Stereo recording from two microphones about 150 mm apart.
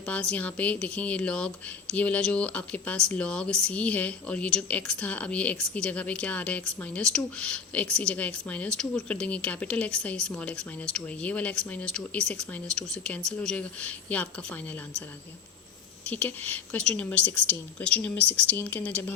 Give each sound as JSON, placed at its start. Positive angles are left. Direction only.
{"t": 0.0, "sound": "speech", "side_deg": 5}
{"t": 16.0, "sound": "speech", "side_deg": 10}